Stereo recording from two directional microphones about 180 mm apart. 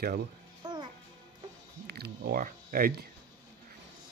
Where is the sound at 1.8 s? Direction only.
60° right (ahead or behind).